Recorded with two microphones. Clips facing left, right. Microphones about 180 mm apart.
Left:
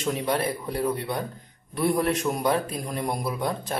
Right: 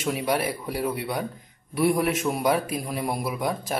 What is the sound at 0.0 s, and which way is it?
A man's voice, 5° right (ahead or behind).